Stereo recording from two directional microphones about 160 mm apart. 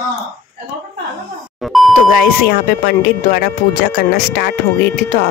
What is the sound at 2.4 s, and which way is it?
Speech, 65° left (ahead or behind).